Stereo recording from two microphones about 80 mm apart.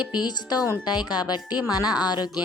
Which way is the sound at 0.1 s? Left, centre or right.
Left.